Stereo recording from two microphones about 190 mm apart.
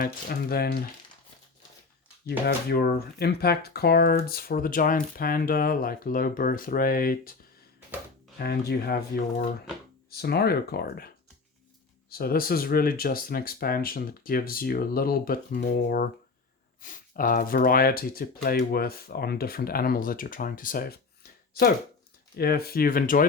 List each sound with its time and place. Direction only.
0.0 s speech: 50° left (ahead or behind)
2.2 s speech: 55° left (ahead or behind)
8.4 s speech: 55° left (ahead or behind)
10.1 s speech: 55° left (ahead or behind)
12.1 s speech: 50° left (ahead or behind)
22.4 s speech: 55° left (ahead or behind)